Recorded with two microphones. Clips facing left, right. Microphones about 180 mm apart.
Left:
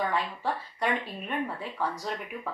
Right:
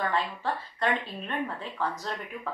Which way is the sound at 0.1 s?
10° left (ahead or behind).